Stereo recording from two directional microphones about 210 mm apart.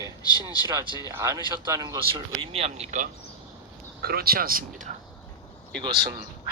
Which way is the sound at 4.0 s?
50° right (ahead or behind).